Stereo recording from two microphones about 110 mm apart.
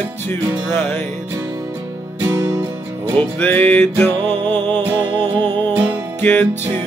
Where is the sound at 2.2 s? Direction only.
30° right (ahead or behind).